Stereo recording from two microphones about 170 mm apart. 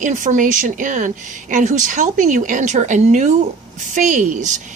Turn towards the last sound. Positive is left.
turn(degrees=-45)  # may be behind; listen again after turning